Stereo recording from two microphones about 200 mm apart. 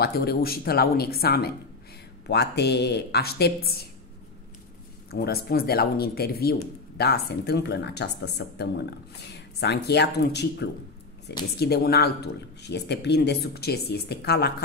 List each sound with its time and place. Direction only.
0.0 s speech: 50° left (ahead or behind)
5.1 s speech: 50° left (ahead or behind)